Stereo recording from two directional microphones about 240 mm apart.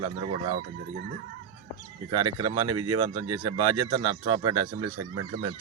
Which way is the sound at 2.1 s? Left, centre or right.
Centre.